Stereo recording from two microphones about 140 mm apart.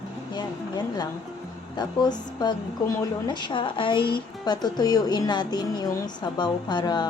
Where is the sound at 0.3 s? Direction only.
30° left (ahead or behind).